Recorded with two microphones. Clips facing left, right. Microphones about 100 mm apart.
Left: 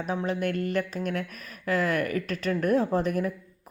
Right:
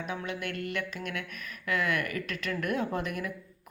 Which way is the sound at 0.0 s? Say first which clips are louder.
Left 7 dB; 35° left (ahead or behind).